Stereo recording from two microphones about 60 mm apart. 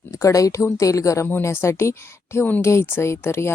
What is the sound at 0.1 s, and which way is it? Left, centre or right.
Speech, left.